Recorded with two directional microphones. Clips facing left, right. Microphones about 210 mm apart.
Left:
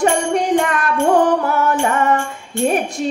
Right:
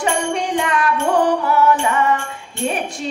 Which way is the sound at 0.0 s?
50° left (ahead or behind).